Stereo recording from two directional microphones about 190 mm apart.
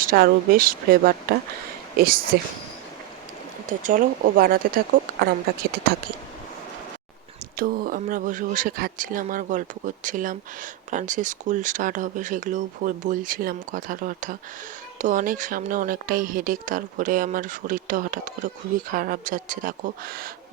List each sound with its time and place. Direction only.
0.0 s speech: 50° right (ahead or behind)
3.7 s speech: 45° right (ahead or behind)
7.5 s speech: 50° right (ahead or behind)